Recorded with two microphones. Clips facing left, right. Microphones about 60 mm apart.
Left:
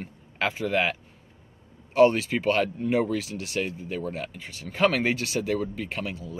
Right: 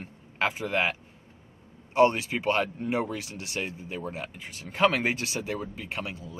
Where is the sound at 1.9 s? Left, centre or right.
Centre.